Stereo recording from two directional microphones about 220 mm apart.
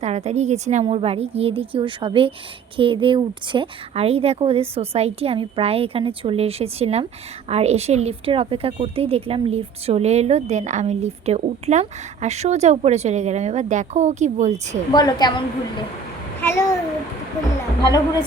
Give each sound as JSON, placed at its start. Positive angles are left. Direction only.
{"t": 0.0, "sound": "speech", "side_deg": -30}
{"t": 14.9, "sound": "a woman's voice", "side_deg": 20}
{"t": 16.4, "sound": "a child's voice", "side_deg": 10}
{"t": 17.8, "sound": "a woman's voice", "side_deg": 15}